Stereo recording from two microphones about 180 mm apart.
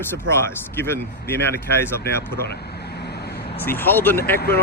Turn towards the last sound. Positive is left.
turn(degrees=10)  # may be behind; listen again after turning